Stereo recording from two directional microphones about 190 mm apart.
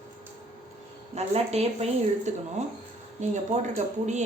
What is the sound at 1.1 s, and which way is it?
Speech, 35° right (ahead or behind).